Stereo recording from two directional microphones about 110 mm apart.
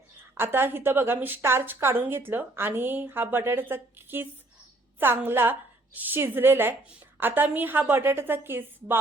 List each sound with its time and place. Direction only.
0.3 s a woman's voice: 20° right (ahead or behind)